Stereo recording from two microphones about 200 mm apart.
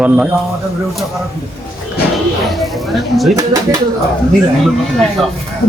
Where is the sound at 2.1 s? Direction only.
Centre (ahead or behind).